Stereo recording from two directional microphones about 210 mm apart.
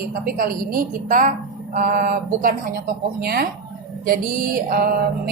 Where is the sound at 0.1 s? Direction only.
45° right (ahead or behind).